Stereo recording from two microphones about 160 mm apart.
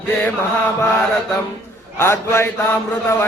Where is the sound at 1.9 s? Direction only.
15° left (ahead or behind).